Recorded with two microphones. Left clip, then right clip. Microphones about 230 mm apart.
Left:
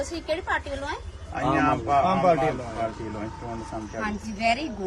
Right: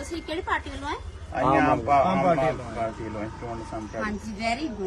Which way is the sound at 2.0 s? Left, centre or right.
Left.